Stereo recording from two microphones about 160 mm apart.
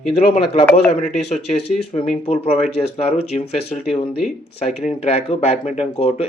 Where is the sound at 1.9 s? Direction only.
35° left (ahead or behind).